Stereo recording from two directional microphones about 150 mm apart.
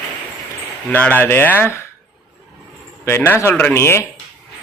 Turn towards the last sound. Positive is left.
turn(degrees=15)  # may be behind; listen again after turning